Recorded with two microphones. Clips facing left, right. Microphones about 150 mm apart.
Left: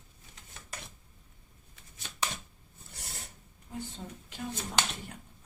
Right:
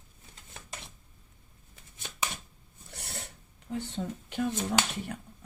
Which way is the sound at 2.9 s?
70° right (ahead or behind).